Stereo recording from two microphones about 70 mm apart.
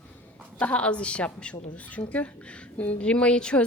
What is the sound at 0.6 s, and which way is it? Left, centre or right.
Speech, centre.